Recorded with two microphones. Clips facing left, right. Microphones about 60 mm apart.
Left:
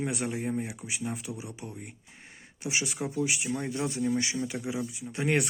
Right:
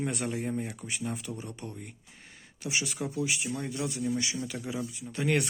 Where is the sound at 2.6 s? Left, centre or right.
Left.